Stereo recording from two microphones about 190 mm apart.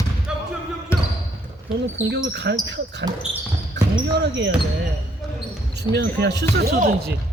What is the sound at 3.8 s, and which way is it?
Basketball bounce, 65° right (ahead or behind).